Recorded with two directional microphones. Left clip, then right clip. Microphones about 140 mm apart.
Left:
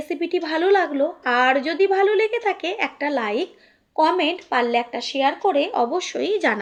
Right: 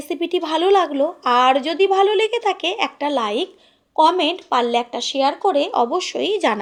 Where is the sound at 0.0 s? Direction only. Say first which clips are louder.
Right 2 dB; 40° right (ahead or behind).